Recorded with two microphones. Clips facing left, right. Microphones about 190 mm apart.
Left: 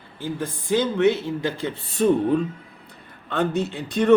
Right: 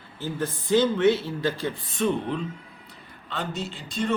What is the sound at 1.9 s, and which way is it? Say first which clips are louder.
Speech: left 8 dB; 45° left (ahead or behind).